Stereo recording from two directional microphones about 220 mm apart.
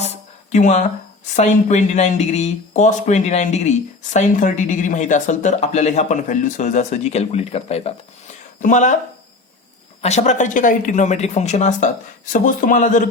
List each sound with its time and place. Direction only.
0.5 s speech: 30° left (ahead or behind)
10.0 s speech: 30° left (ahead or behind)